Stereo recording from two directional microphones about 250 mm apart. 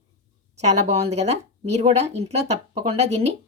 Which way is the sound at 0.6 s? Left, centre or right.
Right.